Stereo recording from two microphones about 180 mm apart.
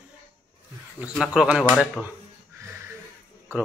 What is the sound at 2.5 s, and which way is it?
Music, 15° right (ahead or behind).